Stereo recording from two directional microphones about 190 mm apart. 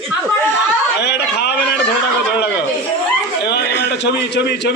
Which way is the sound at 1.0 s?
60° left (ahead or behind).